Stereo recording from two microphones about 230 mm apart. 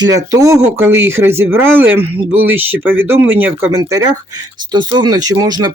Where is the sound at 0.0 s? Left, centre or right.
Centre.